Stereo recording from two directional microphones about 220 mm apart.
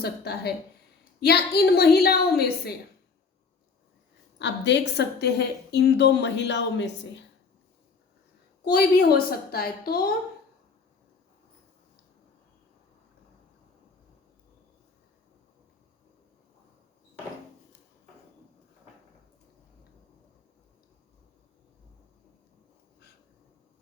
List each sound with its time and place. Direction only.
0.0 s a woman's voice: 45° left (ahead or behind)
4.4 s a woman's voice: 50° left (ahead or behind)
8.7 s a woman's voice: 45° left (ahead or behind)